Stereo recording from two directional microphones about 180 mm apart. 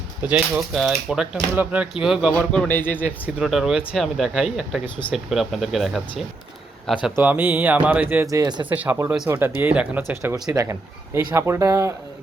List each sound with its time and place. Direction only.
0.2 s speech: 5° right (ahead or behind); by 3.0 s 10° left (ahead or behind)
3.0 s speech: 10° right (ahead or behind)
8.7 s speech: 10° right (ahead or behind)
10.3 s speech: 20° right (ahead or behind)